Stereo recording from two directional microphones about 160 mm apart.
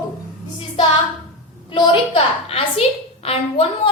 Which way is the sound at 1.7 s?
30° left (ahead or behind).